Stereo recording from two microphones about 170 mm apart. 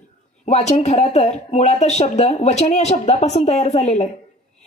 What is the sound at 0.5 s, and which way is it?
Speech, 40° left (ahead or behind).